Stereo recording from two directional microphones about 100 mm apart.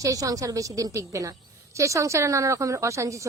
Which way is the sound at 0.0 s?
35° right (ahead or behind).